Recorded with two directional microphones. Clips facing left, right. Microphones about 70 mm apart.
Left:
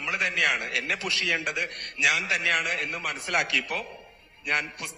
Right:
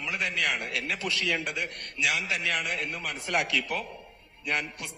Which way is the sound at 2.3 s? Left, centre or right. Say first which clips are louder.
Left 3 dB; left.